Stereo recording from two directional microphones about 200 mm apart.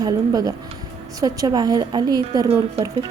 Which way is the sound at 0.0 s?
20° right (ahead or behind).